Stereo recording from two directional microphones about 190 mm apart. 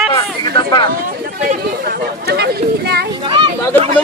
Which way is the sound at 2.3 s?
60° right (ahead or behind).